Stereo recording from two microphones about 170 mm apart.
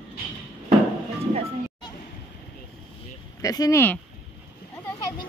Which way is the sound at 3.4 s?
20° left (ahead or behind).